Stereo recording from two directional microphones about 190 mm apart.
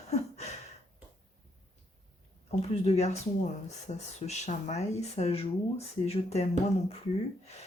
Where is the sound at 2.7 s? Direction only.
35° left (ahead or behind).